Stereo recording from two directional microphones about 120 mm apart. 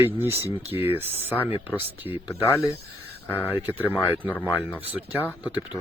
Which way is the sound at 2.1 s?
50° left (ahead or behind).